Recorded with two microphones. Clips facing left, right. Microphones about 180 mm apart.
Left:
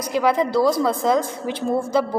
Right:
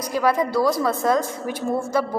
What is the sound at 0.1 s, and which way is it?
A woman's voice, 20° left (ahead or behind).